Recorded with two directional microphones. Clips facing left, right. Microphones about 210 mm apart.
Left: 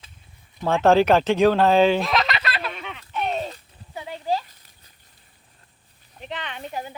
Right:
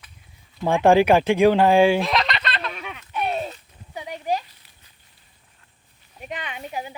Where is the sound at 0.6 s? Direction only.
15° right (ahead or behind).